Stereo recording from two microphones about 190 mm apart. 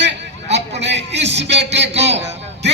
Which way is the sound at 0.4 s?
35° right (ahead or behind).